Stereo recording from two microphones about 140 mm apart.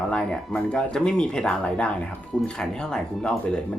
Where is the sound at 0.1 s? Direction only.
5° left (ahead or behind).